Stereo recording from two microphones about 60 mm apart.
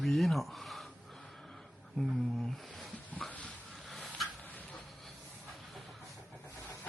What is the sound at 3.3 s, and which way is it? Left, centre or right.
Dog, left.